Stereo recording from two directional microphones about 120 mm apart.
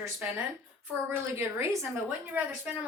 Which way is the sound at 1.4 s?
25° right (ahead or behind).